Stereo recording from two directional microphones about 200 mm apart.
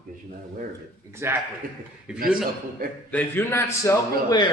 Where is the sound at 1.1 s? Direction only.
10° right (ahead or behind).